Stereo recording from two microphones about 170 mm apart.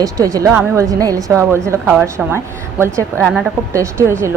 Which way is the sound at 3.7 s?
15° right (ahead or behind).